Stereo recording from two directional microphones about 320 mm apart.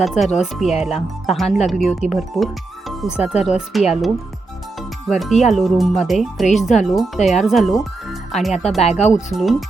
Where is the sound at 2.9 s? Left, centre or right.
Centre.